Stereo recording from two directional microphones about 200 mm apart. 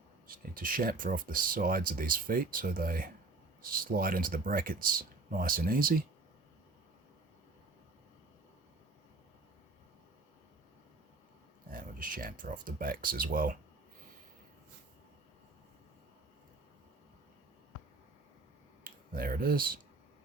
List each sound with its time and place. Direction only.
0.3 s speech: 45° right (ahead or behind)
11.7 s speech: 45° right (ahead or behind)
18.9 s speech: 45° right (ahead or behind)